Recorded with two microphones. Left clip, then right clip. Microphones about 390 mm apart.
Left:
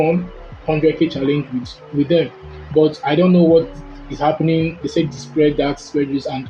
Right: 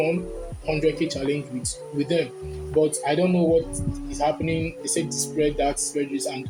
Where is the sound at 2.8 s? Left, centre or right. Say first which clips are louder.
Left 7 dB; right.